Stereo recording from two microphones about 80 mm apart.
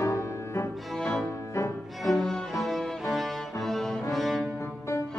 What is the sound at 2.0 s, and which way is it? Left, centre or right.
Music, centre.